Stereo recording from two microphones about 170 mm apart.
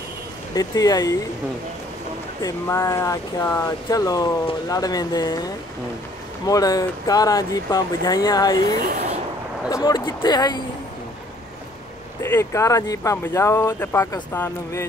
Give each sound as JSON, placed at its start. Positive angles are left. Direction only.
{"t": 0.6, "sound": "speech", "side_deg": 20}
{"t": 2.4, "sound": "speech", "side_deg": 15}
{"t": 6.4, "sound": "speech", "side_deg": 20}
{"t": 12.2, "sound": "speech", "side_deg": 15}